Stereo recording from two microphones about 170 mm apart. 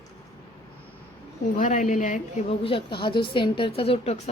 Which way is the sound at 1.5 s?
50° left (ahead or behind).